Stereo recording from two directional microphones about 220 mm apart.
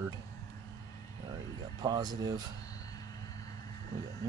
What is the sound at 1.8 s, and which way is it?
Speech, 20° right (ahead or behind).